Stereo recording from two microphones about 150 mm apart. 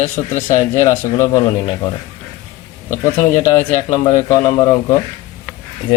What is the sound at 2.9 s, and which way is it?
A man's voice, 20° left (ahead or behind).